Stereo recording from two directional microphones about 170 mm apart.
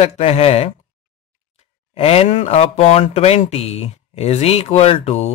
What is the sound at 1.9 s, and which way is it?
Speech, 35° left (ahead or behind).